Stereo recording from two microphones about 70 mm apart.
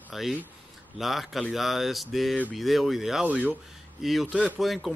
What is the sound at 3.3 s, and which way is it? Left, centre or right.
Speech, right.